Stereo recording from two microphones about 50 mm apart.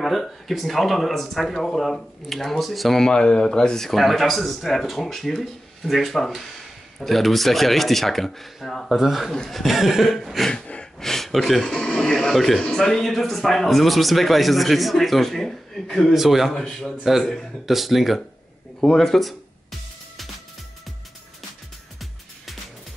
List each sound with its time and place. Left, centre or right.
0.0 s speech: centre
3.1 s speech: centre
10.5 s gasp: centre
11.0 s speech: centre
16.1 s speech: centre
16.5 s a man's voice: centre
17.0 s speech: centre
18.8 s speech: centre